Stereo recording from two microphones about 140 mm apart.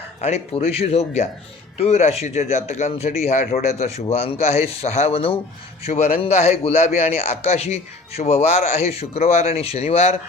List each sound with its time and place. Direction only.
0.2 s a man's voice: 50° left (ahead or behind)
3.2 s a man's voice: 65° left (ahead or behind)
3.8 s a man's voice: 50° left (ahead or behind)